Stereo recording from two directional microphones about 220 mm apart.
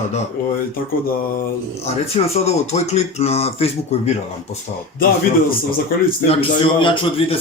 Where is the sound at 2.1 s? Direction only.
30° left (ahead or behind).